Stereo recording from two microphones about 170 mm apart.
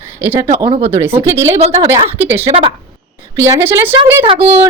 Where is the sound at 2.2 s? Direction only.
15° right (ahead or behind).